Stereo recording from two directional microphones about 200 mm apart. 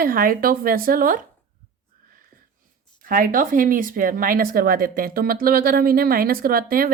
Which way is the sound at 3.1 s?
45° right (ahead or behind).